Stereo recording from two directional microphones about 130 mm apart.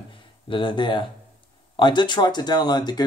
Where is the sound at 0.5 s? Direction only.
40° left (ahead or behind).